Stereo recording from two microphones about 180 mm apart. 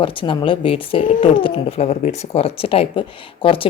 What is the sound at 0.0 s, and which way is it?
Speech, 30° left (ahead or behind).